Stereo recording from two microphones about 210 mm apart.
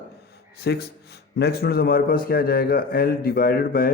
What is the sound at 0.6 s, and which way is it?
A man's voice, 55° left (ahead or behind).